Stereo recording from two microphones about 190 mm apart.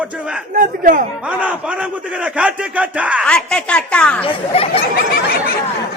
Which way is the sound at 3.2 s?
5° left (ahead or behind).